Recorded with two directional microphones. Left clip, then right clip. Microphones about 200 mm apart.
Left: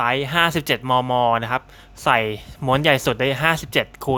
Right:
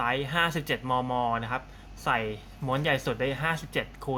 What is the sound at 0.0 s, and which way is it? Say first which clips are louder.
Speech: left 8 dB; 45° left (ahead or behind).